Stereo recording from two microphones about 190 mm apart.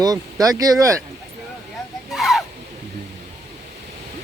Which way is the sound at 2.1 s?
Centre (ahead or behind).